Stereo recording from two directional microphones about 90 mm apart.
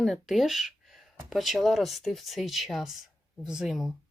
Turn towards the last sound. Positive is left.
turn(degrees=0)  # may be behind; listen again after turning